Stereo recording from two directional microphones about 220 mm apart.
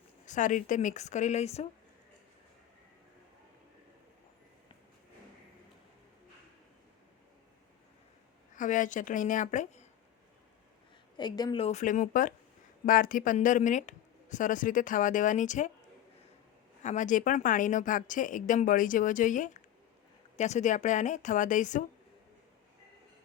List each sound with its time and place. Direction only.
0.3 s speech: 35° left (ahead or behind)
8.5 s speech: 35° left (ahead or behind)
11.2 s speech: 20° left (ahead or behind); by 15.7 s 35° left (ahead or behind)
16.8 s speech: 35° left (ahead or behind)